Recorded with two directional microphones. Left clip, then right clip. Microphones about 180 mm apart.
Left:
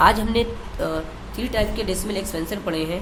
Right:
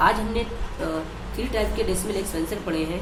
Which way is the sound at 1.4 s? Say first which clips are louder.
Left 1 dB; 25° left (ahead or behind).